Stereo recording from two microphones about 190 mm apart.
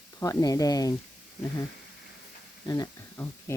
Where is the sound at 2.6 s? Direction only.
20° left (ahead or behind).